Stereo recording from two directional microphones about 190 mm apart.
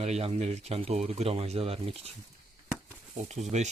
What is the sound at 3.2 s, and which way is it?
Speech, 35° right (ahead or behind).